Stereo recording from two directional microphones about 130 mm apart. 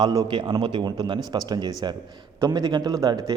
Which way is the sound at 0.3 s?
35° right (ahead or behind).